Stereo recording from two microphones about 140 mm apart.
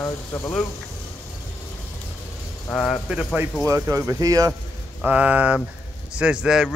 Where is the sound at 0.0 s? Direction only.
15° left (ahead or behind).